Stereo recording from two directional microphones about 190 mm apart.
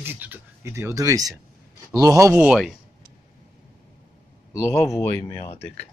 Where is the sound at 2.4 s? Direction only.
5° right (ahead or behind).